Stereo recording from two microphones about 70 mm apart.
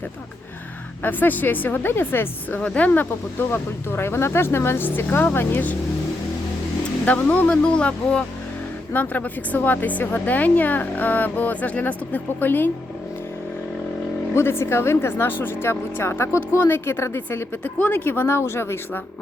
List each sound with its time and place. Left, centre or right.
1.0 s speech: left
2.6 s a woman's voice: centre
2.9 s speech: left
7.0 s speech: left
14.3 s speech: left